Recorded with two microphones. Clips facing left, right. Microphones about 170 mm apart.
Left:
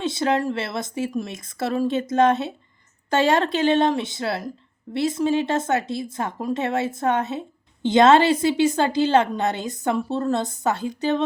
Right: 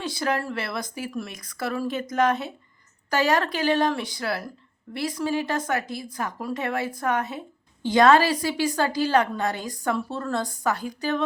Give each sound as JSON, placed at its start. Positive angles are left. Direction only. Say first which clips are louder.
{"t": 0.0, "sound": "speech", "louder": "left 5 dB", "side_deg": 25}